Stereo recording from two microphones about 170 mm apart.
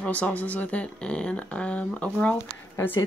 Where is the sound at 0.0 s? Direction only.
10° left (ahead or behind).